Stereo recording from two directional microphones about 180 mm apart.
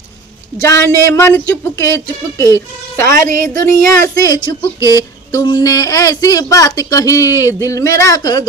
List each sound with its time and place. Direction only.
0.6 s a woman's voice: 15° left (ahead or behind)